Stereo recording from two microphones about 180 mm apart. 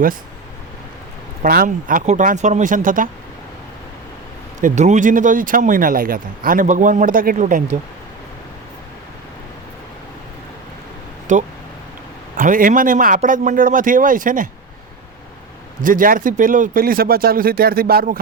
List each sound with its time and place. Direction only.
1.4 s speech: 50° right (ahead or behind)
4.6 s speech: 40° right (ahead or behind)
11.3 s speech: 45° right (ahead or behind)
15.8 s speech: 50° right (ahead or behind)